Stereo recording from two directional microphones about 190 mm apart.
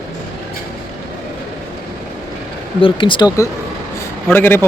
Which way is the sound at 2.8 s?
25° left (ahead or behind).